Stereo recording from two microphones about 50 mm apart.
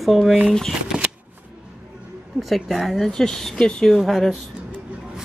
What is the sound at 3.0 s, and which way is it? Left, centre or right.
Speech, centre.